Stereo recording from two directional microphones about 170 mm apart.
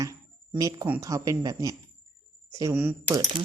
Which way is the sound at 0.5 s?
20° right (ahead or behind).